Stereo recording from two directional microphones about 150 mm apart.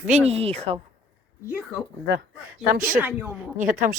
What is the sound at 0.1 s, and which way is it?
Speech, 45° right (ahead or behind).